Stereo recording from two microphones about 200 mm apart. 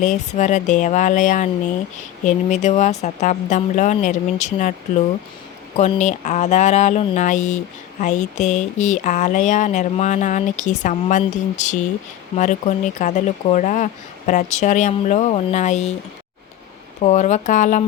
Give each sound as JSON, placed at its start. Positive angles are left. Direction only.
{"t": 0.0, "sound": "speech", "side_deg": 35}
{"t": 5.7, "sound": "speech", "side_deg": 35}
{"t": 17.0, "sound": "speech", "side_deg": 35}